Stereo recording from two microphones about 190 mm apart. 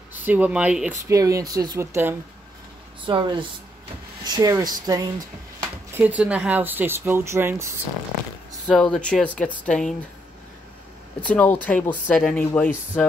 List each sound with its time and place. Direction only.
0.1 s speech: 10° right (ahead or behind)
3.1 s speech: 25° right (ahead or behind)
5.9 s speech: 10° right (ahead or behind)
8.6 s speech: centre (ahead or behind)
11.1 s speech: 10° left (ahead or behind)